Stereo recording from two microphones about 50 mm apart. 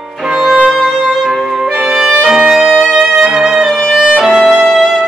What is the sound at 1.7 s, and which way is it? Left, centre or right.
Music, right.